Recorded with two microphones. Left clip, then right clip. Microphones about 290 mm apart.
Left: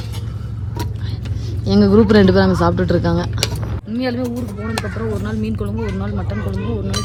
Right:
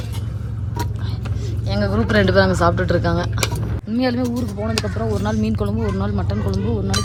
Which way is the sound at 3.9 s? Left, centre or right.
Centre.